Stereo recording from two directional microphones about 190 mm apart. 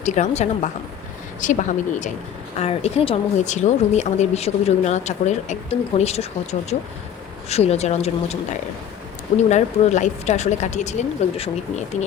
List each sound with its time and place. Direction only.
0.0 s speech: 40° left (ahead or behind)
9.5 s speech: 35° left (ahead or behind)